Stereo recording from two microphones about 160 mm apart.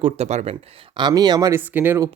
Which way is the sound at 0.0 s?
45° right (ahead or behind).